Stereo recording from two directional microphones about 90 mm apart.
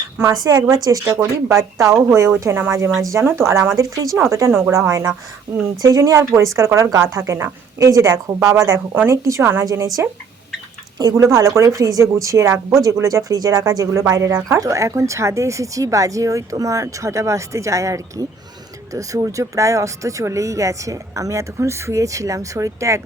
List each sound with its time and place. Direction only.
0.3 s speech: 40° right (ahead or behind)
7.2 s speech: 25° right (ahead or behind)
7.8 s speech: 40° right (ahead or behind)
11.1 s speech: 35° right (ahead or behind)